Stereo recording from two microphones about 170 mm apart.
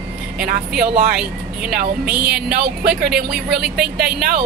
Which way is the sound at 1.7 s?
60° right (ahead or behind).